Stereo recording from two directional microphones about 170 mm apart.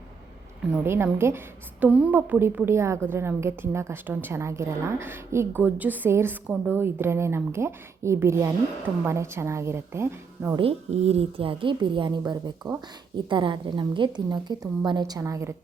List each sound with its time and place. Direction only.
0.6 s a woman's voice: 10° right (ahead or behind)
10.6 s a woman's voice: 35° right (ahead or behind); by 15.5 s 15° right (ahead or behind)